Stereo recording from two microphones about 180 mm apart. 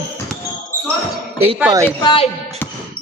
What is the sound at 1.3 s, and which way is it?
Speech, 35° right (ahead or behind).